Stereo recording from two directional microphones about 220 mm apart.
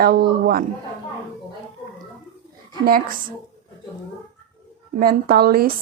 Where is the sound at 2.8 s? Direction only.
40° right (ahead or behind).